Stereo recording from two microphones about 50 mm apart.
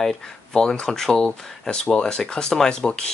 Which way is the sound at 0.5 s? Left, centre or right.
Centre.